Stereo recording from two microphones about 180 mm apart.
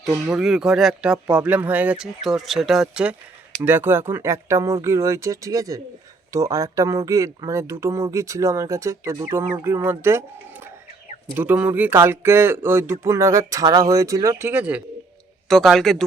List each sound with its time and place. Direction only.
0.0 s speech: 5° right (ahead or behind)
15.4 s speech: centre (ahead or behind)